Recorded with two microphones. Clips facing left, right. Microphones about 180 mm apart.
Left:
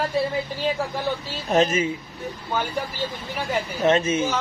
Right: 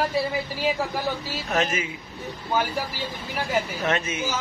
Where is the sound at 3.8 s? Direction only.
30° left (ahead or behind).